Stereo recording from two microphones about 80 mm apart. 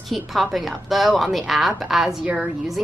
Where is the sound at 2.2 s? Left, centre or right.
Centre.